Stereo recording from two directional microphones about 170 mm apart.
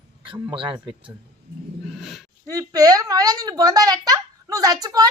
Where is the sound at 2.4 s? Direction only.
20° right (ahead or behind).